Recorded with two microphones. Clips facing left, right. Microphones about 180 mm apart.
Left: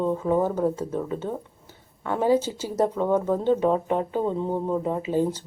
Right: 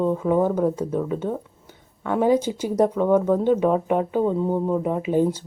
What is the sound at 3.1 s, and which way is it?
Speech, 10° left (ahead or behind).